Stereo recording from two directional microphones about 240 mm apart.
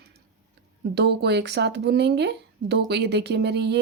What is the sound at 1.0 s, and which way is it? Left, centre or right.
Speech, right.